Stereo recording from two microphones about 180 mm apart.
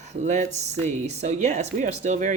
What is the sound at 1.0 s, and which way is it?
Speech, 35° right (ahead or behind).